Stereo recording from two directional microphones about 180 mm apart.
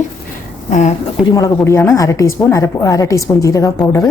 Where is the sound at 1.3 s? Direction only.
15° left (ahead or behind).